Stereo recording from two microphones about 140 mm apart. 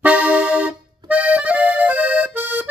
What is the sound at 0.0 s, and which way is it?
Accordion, 10° right (ahead or behind).